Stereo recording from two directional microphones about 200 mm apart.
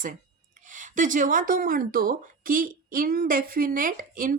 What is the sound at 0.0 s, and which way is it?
A woman's voice, 40° right (ahead or behind).